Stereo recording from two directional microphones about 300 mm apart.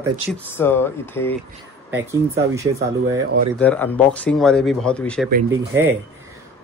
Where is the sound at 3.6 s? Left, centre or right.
Centre.